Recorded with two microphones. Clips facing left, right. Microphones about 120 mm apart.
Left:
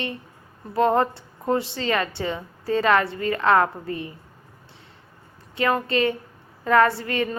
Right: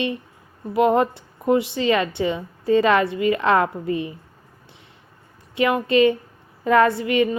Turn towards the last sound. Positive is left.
turn(degrees=-15)  # may be behind; listen again after turning